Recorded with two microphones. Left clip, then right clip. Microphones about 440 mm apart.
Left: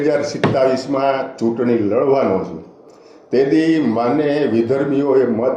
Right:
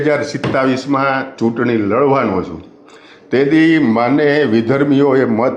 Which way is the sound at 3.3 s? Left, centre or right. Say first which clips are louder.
Right 3 dB; right.